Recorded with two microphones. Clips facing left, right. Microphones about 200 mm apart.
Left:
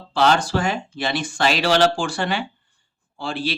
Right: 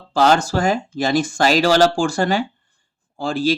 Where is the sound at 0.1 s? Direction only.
45° right (ahead or behind).